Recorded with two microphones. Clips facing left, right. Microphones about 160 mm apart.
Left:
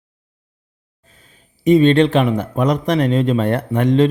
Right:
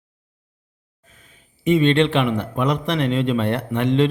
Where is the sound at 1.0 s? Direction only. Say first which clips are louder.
Left 1 dB; 35° left (ahead or behind).